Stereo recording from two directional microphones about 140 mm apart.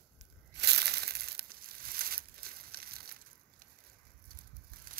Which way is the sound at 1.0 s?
90° right.